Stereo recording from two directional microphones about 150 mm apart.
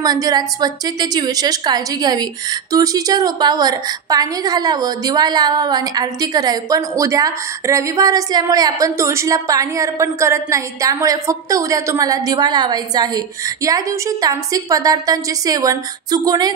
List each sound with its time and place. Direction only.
0.0 s a woman's voice: 25° right (ahead or behind)